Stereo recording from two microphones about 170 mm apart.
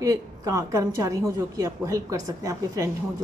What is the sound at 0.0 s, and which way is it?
A woman's voice, 20° right (ahead or behind).